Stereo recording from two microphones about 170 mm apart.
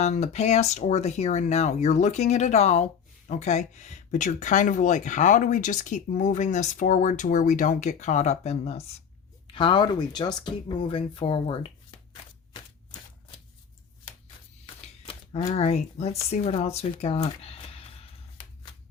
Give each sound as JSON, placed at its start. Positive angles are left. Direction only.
{"t": 0.0, "sound": "speech", "side_deg": 40}
{"t": 14.8, "sound": "speech", "side_deg": 35}